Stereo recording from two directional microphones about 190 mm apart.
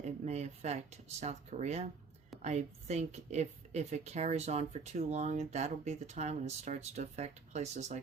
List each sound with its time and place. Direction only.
0.0 s a woman's voice: 35° right (ahead or behind)